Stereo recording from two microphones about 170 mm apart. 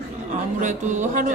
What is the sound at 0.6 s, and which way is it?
Speech, 45° right (ahead or behind).